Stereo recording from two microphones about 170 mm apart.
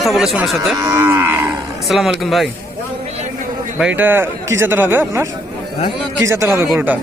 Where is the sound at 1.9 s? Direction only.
Centre (ahead or behind).